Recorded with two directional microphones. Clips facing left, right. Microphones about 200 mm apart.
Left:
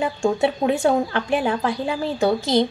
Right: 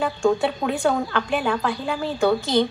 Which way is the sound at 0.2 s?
25° left (ahead or behind).